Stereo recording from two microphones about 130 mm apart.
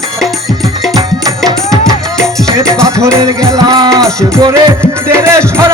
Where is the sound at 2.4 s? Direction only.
25° right (ahead or behind).